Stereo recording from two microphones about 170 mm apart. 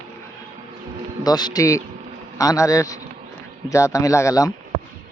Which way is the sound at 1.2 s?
25° left (ahead or behind).